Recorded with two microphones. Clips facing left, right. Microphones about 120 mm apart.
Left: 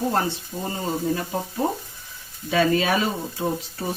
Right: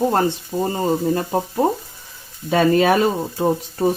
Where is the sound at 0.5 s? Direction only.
50° right (ahead or behind).